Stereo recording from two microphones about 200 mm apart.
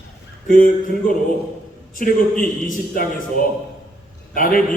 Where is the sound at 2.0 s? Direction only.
45° left (ahead or behind).